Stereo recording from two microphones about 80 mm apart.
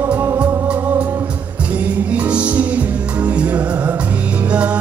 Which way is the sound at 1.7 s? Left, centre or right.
Centre.